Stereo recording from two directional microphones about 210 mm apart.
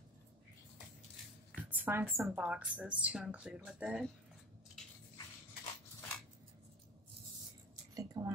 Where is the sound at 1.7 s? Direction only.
10° right (ahead or behind).